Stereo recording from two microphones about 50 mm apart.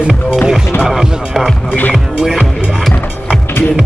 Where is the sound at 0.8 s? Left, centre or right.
Centre.